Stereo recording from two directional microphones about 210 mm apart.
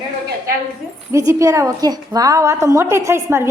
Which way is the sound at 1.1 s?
15° right (ahead or behind).